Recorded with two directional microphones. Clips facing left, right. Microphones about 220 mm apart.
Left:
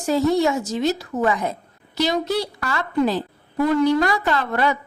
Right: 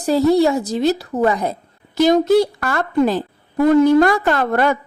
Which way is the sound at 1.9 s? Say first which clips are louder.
Right 9 dB; 50° right (ahead or behind).